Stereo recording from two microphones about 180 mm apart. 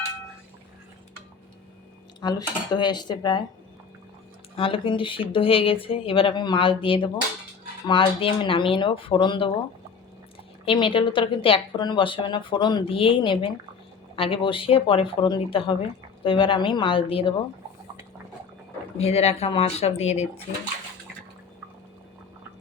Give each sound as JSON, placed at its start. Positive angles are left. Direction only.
{"t": 2.2, "sound": "speech", "side_deg": 25}
{"t": 4.5, "sound": "speech", "side_deg": 30}
{"t": 10.7, "sound": "speech", "side_deg": 30}
{"t": 18.9, "sound": "speech", "side_deg": 35}